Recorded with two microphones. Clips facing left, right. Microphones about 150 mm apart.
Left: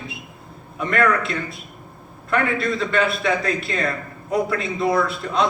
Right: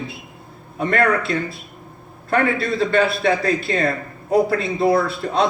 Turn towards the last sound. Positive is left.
turn(degrees=-30)  # may be behind; listen again after turning